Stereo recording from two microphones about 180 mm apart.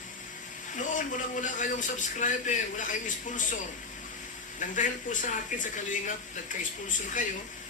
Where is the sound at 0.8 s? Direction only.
45° left (ahead or behind).